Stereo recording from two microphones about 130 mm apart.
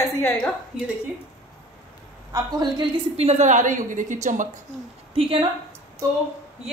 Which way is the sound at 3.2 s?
55° right (ahead or behind).